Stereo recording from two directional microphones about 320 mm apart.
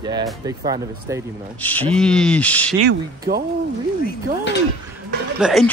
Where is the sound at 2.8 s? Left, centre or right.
Right.